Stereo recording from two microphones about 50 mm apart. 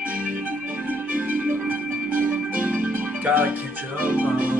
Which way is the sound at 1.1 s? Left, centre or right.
Right.